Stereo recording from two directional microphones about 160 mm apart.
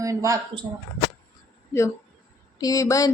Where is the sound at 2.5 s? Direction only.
20° left (ahead or behind).